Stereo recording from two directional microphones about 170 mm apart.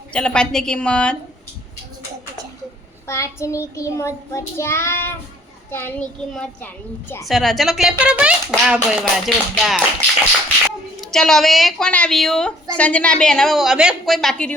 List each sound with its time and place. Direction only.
0.1 s speech: 5° left (ahead or behind)
3.1 s child singing: 15° left (ahead or behind)
7.3 s speech: centre (ahead or behind)
11.0 s speech: 5° left (ahead or behind)